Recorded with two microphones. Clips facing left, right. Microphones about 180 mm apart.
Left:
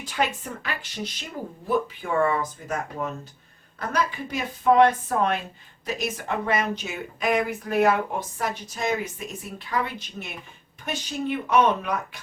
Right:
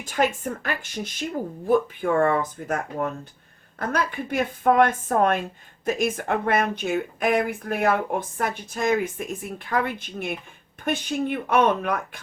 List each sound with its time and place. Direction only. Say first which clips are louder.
0.0 s speech: right 4 dB; 50° right (ahead or behind)
3.8 s speech: right 1 dB; 55° right (ahead or behind)